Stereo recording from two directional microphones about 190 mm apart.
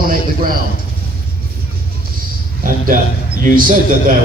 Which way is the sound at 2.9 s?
45° right (ahead or behind).